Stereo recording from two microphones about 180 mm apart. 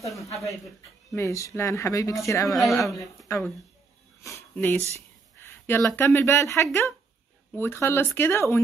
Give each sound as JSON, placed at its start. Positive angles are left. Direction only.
{"t": 1.1, "sound": "speech", "side_deg": 15}
{"t": 2.5, "sound": "speech", "side_deg": 0}
{"t": 2.9, "sound": "speech", "side_deg": 15}